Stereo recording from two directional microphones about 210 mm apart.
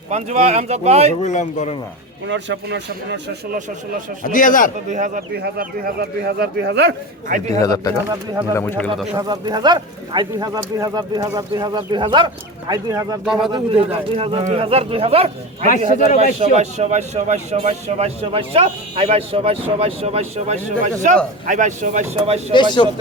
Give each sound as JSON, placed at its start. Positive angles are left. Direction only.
{"t": 0.1, "sound": "a man's voice", "side_deg": -30}
{"t": 1.2, "sound": "speech", "side_deg": 35}
{"t": 2.2, "sound": "speech", "side_deg": -60}
{"t": 4.2, "sound": "speech", "side_deg": 40}
{"t": 4.9, "sound": "speech", "side_deg": -35}
{"t": 7.6, "sound": "speech", "side_deg": 20}
{"t": 8.1, "sound": "speech", "side_deg": -15}
{"t": 8.5, "sound": "speech", "side_deg": 10}
{"t": 9.1, "sound": "speech", "side_deg": -20}
{"t": 13.2, "sound": "a man's voice", "side_deg": 0}
{"t": 13.5, "sound": "speech", "side_deg": -25}
{"t": 16.4, "sound": "a man's voice", "side_deg": -30}
{"t": 22.8, "sound": "speech", "side_deg": 25}